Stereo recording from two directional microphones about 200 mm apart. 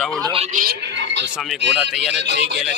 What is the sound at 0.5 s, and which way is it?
Speech, 55° right (ahead or behind).